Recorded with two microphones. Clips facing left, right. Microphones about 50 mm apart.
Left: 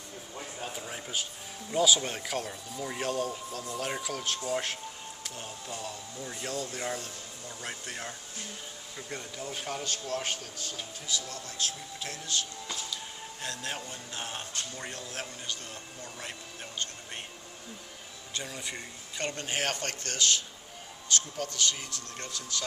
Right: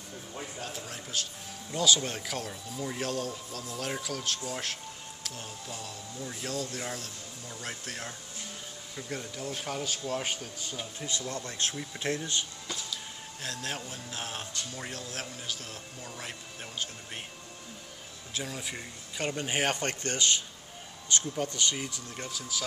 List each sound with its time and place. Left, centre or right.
0.6 s a sound: centre
1.7 s speech: centre
11.1 s speech: right
12.9 s music: centre
14.8 s speech: centre
18.3 s speech: centre